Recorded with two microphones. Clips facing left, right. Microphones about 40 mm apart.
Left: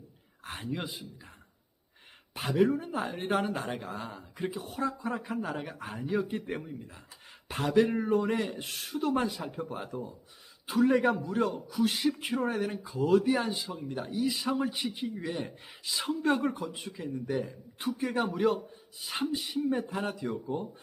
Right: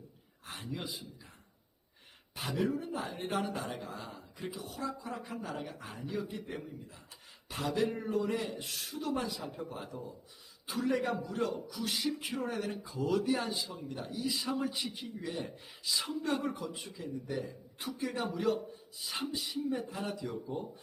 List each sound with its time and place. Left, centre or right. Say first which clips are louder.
0.4 s speech: left 5 dB; left
2.6 s speech: left 7 dB; left